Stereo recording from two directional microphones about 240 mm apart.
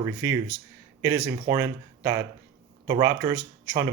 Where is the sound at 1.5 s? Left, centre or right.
Centre.